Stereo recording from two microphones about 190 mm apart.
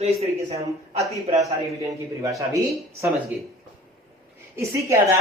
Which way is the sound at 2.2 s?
15° right (ahead or behind).